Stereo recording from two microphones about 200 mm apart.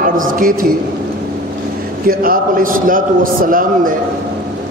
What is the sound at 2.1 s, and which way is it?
A man's voice, 45° right (ahead or behind).